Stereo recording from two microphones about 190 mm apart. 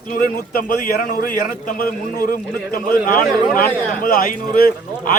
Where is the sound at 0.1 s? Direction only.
45° left (ahead or behind).